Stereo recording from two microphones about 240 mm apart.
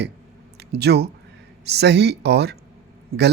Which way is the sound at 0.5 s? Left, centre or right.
Right.